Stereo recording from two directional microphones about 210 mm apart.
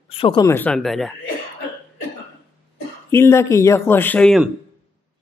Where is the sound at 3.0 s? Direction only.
10° left (ahead or behind).